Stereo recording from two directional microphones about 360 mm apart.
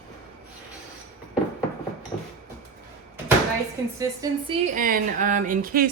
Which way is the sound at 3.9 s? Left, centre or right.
Centre.